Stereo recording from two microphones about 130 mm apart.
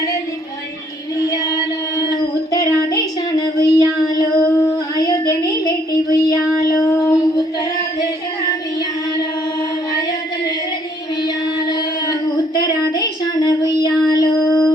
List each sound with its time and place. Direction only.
2.0 s female singing: 30° left (ahead or behind)
12.5 s child singing: 30° left (ahead or behind)